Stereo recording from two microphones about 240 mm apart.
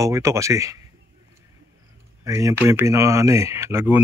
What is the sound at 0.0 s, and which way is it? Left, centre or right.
Speech, centre.